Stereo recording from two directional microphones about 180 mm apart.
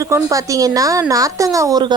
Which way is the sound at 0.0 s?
20° right (ahead or behind).